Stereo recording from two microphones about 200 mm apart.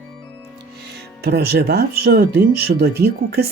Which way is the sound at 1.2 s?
55° right (ahead or behind).